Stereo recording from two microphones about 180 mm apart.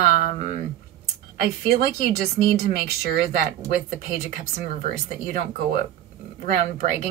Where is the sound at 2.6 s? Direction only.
60° right (ahead or behind).